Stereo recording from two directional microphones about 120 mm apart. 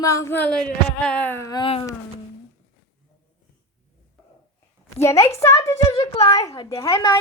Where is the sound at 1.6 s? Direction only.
50° left (ahead or behind).